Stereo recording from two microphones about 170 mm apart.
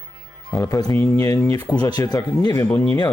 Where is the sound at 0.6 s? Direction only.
20° left (ahead or behind).